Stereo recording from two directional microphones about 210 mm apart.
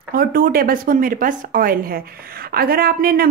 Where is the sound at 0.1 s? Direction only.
45° right (ahead or behind).